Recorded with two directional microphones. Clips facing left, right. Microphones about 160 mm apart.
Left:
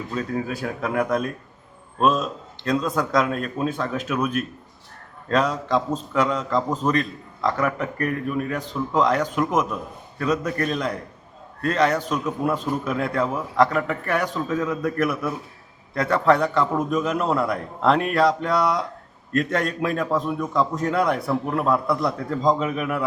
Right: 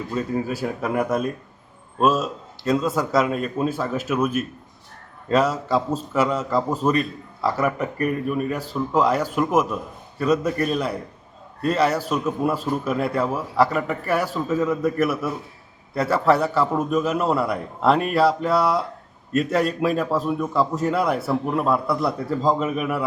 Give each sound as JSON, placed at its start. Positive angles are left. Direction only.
{"t": 0.1, "sound": "a man's voice", "side_deg": -5}